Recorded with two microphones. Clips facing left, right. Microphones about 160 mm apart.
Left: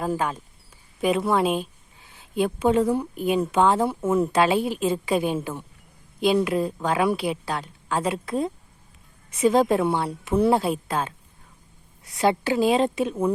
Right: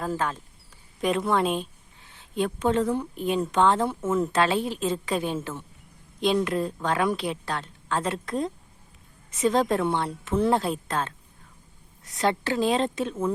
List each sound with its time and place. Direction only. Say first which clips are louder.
0.0 s speech: left 3 dB; 10° left (ahead or behind)